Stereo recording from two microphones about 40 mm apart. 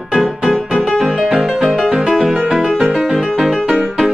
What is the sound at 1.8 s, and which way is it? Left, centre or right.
Music, right.